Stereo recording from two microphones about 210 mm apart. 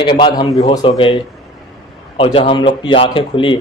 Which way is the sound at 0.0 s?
20° left (ahead or behind).